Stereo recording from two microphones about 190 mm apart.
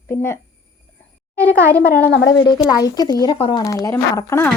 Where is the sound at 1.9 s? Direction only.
60° left (ahead or behind).